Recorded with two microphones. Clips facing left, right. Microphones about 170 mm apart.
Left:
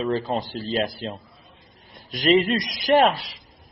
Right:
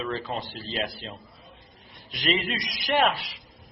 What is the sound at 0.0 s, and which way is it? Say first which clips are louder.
A man's voice: left 7 dB; 35° left (ahead or behind).